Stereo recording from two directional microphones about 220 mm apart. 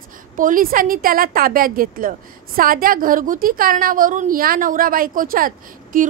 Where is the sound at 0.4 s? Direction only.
40° right (ahead or behind).